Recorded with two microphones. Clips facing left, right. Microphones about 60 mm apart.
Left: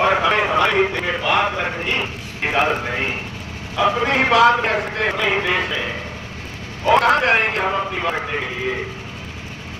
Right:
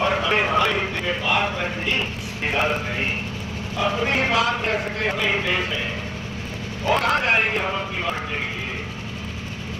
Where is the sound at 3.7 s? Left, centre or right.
Left.